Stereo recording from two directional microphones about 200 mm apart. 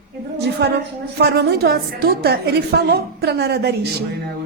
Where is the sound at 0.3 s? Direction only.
55° right (ahead or behind).